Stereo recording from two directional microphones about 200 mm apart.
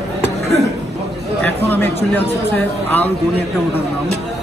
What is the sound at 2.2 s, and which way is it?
Speech, 10° left (ahead or behind).